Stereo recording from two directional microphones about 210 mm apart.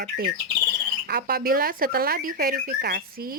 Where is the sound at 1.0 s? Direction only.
45° right (ahead or behind).